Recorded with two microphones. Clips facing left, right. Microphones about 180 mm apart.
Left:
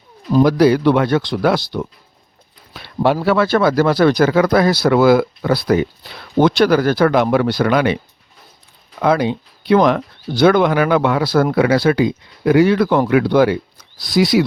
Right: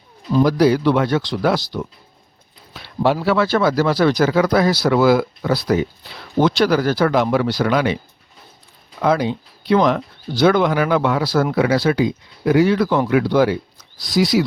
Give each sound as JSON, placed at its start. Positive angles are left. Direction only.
{"t": 0.4, "sound": "speech", "side_deg": 60}
{"t": 2.7, "sound": "a sound", "side_deg": 60}
{"t": 3.2, "sound": "speech", "side_deg": 55}
{"t": 9.0, "sound": "speech", "side_deg": 60}